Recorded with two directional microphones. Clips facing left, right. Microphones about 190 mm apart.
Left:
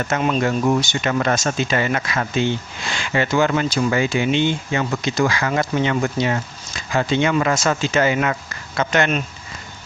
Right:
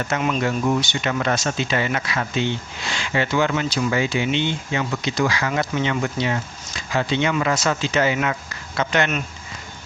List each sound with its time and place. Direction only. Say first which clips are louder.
0.2 s speech: left 4 dB; 35° left (ahead or behind)